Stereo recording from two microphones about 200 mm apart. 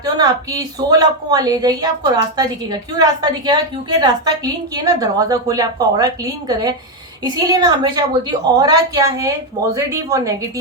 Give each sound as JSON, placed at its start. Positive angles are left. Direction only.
{"t": 0.0, "sound": "a woman's voice", "side_deg": -20}
{"t": 3.0, "sound": "a woman's voice", "side_deg": -20}